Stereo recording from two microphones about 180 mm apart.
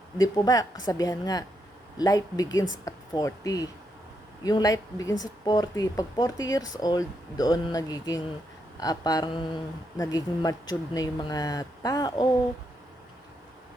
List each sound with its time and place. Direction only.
0.2 s speech: 20° left (ahead or behind)